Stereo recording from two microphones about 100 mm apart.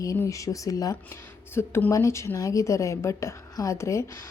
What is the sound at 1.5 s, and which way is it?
Speech, 25° left (ahead or behind).